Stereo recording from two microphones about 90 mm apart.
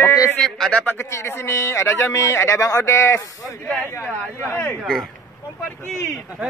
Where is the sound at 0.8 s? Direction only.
25° left (ahead or behind).